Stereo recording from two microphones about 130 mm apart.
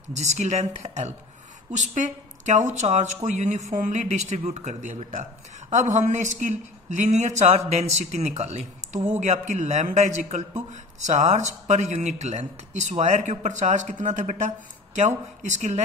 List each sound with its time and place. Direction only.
0.1 s speech: 65° right (ahead or behind)